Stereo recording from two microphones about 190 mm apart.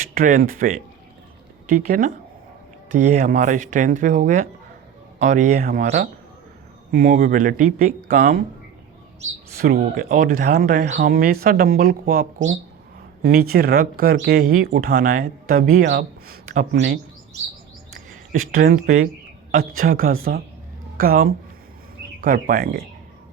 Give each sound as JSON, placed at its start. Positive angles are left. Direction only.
{"t": 0.0, "sound": "speech", "side_deg": -45}
{"t": 9.6, "sound": "speech", "side_deg": -50}
{"t": 11.1, "sound": "speech", "side_deg": -55}
{"t": 18.5, "sound": "speech", "side_deg": -45}